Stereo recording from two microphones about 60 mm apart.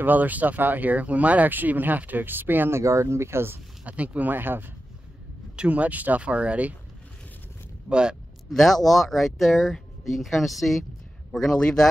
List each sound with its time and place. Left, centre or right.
0.0 s speech: right
2.8 s speech: right
3.8 s speech: right
5.6 s speech: right
7.9 s speech: centre
8.5 s speech: centre